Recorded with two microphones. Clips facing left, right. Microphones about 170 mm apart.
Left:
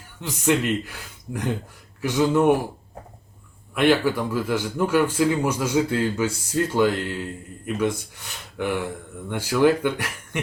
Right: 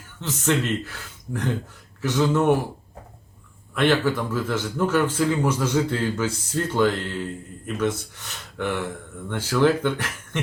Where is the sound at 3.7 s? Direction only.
10° left (ahead or behind).